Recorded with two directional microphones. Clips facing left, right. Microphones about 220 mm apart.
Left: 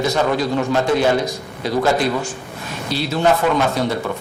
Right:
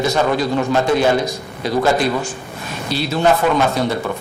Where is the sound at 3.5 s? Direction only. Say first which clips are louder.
Right 1 dB; 25° right (ahead or behind).